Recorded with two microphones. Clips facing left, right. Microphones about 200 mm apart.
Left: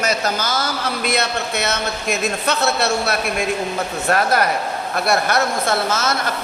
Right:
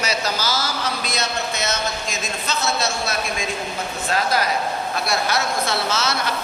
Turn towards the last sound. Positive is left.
turn(degrees=50)  # may be behind; listen again after turning